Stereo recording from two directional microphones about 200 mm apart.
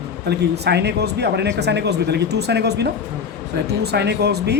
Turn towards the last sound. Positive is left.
turn(degrees=-55)  # may be behind; listen again after turning